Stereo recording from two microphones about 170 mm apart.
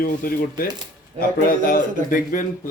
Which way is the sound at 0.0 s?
60° left (ahead or behind).